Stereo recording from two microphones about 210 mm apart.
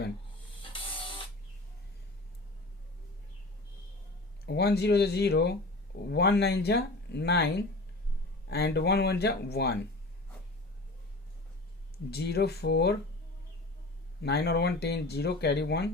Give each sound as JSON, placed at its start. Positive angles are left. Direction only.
{"t": 0.6, "sound": "music", "side_deg": 25}
{"t": 4.4, "sound": "speech", "side_deg": 50}
{"t": 12.1, "sound": "speech", "side_deg": 50}
{"t": 14.2, "sound": "speech", "side_deg": 50}